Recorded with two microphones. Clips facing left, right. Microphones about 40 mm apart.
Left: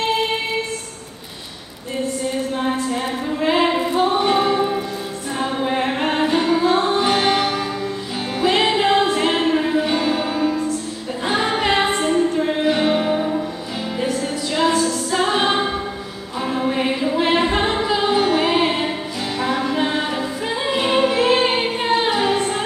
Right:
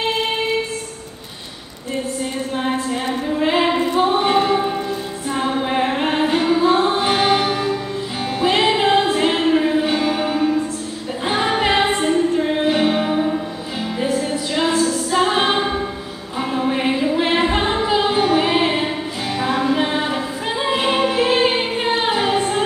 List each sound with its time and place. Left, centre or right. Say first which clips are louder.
0.1 s music: left 1 dB; centre
2.5 s choir: even; centre
4.2 s music: right 1 dB; centre
16.3 s a capella: right 1 dB; centre
19.4 s music: right 2 dB; centre